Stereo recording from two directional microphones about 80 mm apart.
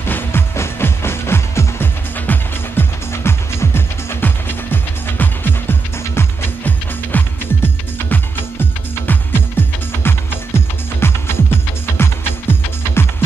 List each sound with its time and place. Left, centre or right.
0.0 s music: left